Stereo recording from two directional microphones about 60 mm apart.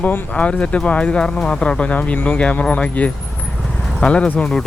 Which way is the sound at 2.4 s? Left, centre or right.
Centre.